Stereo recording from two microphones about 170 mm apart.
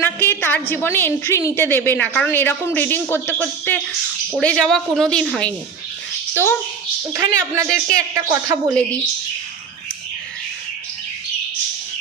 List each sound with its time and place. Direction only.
0.0 s a woman's voice: 10° left (ahead or behind)
7.1 s speech: 15° right (ahead or behind)